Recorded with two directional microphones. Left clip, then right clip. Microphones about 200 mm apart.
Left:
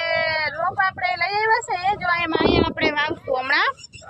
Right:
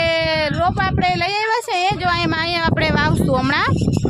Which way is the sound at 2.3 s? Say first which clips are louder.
Left 1 dB; 35° right (ahead or behind).